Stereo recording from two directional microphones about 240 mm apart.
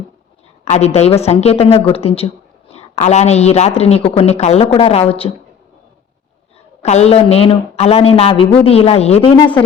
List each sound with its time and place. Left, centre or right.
0.6 s speech: left
6.8 s speech: left
9.3 s speech: centre